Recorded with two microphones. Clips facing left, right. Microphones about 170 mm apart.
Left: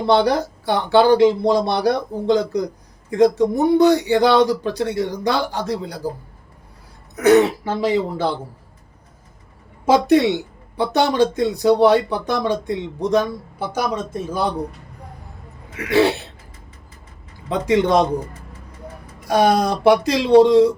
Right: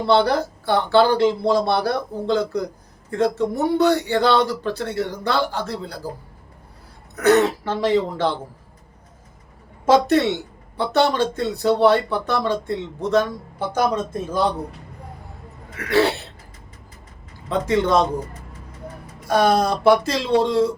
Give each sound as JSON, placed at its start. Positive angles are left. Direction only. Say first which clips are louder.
{"t": 0.1, "sound": "speech", "louder": "left 1 dB", "side_deg": 15}
{"t": 7.2, "sound": "speech", "louder": "left 3 dB", "side_deg": 15}
{"t": 9.8, "sound": "speech", "louder": "left 2 dB", "side_deg": 10}
{"t": 15.9, "sound": "speech", "louder": "left 2 dB", "side_deg": 15}
{"t": 17.5, "sound": "speech", "louder": "left 2 dB", "side_deg": 15}
{"t": 19.3, "sound": "speech", "louder": "left 1 dB", "side_deg": 15}